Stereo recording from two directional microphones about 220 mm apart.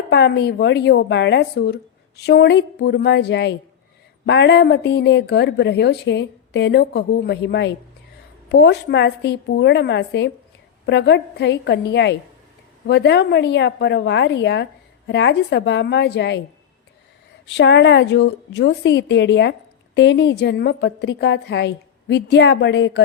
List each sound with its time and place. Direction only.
0.1 s a woman's voice: 50° left (ahead or behind)
17.4 s a woman's voice: 55° left (ahead or behind)